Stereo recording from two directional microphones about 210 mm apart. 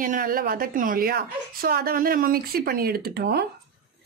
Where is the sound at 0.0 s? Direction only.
40° right (ahead or behind).